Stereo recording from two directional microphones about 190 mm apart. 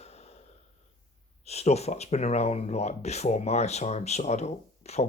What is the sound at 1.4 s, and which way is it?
Speech, 35° left (ahead or behind).